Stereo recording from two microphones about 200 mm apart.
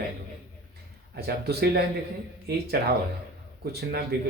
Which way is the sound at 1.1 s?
50° right (ahead or behind).